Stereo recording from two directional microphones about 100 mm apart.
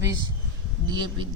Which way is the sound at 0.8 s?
50° right (ahead or behind).